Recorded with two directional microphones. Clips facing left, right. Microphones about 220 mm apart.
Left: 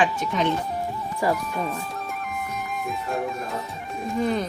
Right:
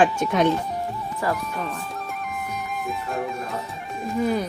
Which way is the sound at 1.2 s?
Centre (ahead or behind).